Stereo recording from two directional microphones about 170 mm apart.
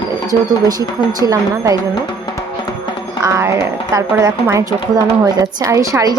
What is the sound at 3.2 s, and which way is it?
A woman's voice, 15° right (ahead or behind).